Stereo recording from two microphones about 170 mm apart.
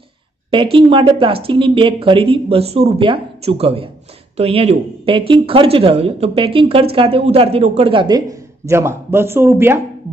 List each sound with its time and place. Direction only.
0.5 s speech: 30° right (ahead or behind); by 9.8 s 15° right (ahead or behind)